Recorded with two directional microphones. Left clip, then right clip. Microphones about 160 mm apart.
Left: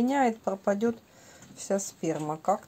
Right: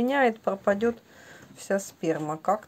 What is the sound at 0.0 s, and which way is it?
Speech, 20° right (ahead or behind).